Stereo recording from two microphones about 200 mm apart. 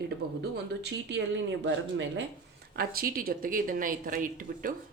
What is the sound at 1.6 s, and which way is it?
Speech, 65° right (ahead or behind).